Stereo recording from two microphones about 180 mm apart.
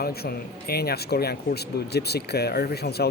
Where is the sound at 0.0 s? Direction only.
60° left (ahead or behind).